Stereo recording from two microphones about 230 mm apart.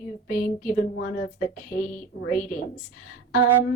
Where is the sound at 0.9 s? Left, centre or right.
Left.